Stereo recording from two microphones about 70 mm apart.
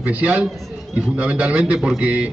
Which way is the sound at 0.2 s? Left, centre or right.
Centre.